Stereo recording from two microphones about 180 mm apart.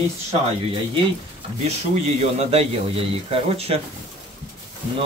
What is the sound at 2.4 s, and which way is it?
Speech, 35° right (ahead or behind).